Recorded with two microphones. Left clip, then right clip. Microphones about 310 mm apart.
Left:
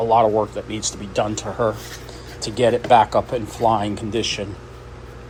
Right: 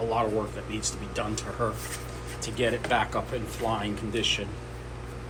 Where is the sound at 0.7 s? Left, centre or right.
Centre.